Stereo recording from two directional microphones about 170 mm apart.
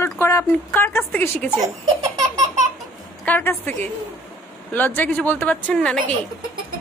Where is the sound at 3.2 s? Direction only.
10° left (ahead or behind).